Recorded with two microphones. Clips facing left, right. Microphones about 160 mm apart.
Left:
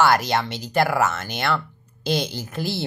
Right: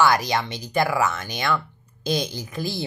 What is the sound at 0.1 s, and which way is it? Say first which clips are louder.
Speech: left 2 dB; 15° right (ahead or behind).